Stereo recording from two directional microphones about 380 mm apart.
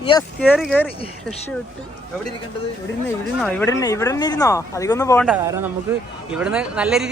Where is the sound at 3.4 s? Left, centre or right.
Centre.